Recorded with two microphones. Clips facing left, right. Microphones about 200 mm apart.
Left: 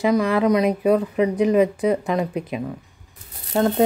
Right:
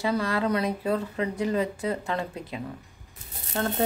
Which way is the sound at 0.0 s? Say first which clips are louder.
Left 8 dB; 15° left (ahead or behind).